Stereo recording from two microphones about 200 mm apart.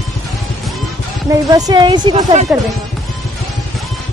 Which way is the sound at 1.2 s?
20° right (ahead or behind).